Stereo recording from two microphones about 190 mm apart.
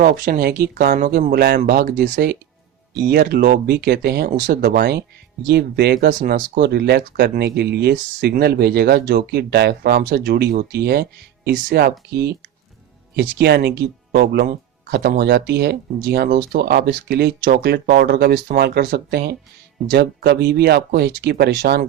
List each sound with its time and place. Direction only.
0.0 s speech: 50° right (ahead or behind)